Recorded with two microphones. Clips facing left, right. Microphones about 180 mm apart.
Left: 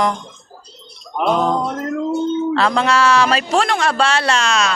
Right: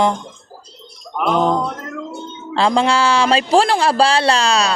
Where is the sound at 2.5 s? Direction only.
30° right (ahead or behind).